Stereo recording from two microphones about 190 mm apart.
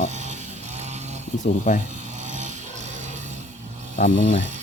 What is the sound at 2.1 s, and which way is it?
Chainsaw, 40° right (ahead or behind).